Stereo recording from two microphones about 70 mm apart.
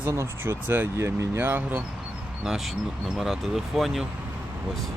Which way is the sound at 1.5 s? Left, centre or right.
Right.